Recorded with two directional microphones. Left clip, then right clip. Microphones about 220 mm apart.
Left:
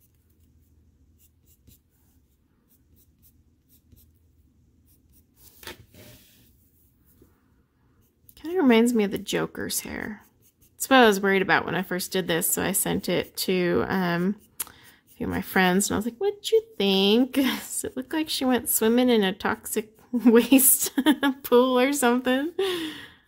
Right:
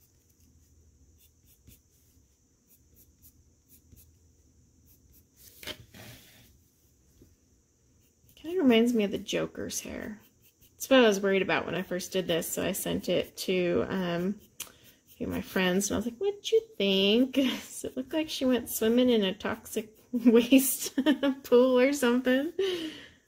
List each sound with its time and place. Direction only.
8.4 s a woman's voice: 30° left (ahead or behind)